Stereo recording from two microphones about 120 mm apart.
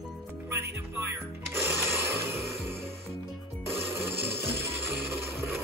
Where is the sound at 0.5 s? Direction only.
20° right (ahead or behind).